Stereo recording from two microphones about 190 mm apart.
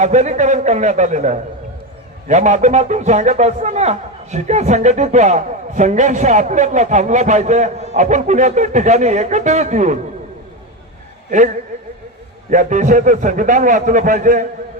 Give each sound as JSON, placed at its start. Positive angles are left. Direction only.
{"t": 0.0, "sound": "a man's voice", "side_deg": -40}
{"t": 11.3, "sound": "a man's voice", "side_deg": -40}